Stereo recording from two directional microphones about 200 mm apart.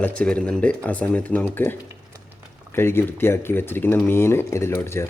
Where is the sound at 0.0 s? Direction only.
5° left (ahead or behind).